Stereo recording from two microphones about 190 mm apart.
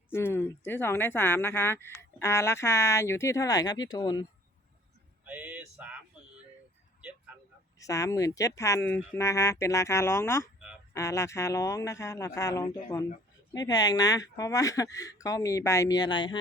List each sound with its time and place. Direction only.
0.1 s speech: 10° left (ahead or behind)
5.2 s a sound: 10° right (ahead or behind)
7.8 s speech: 15° left (ahead or behind)